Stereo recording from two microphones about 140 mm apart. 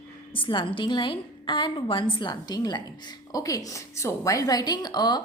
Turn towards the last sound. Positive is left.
turn(degrees=30)  # may be behind; listen again after turning